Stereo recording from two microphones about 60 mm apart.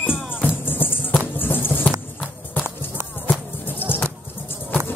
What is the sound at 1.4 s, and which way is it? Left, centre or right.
Music, left.